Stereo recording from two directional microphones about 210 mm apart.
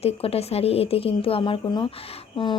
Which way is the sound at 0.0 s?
30° left (ahead or behind).